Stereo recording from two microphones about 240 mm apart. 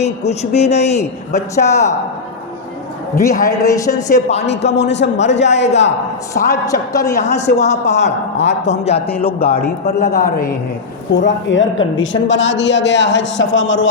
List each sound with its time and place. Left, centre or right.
0.0 s a man's voice: left
1.4 s a woman's voice: centre
3.4 s a woman's voice: centre
4.1 s a man's voice: left
4.7 s a woman's voice: left
6.3 s a woman's voice: centre
7.2 s a man's voice: left
9.6 s a woman's voice: left
11.1 s a woman's voice: left